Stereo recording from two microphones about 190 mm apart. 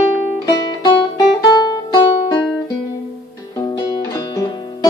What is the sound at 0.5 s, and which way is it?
Music, 25° left (ahead or behind).